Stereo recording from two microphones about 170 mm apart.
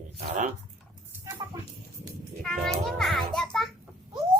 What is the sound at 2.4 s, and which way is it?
A child's voice, centre (ahead or behind).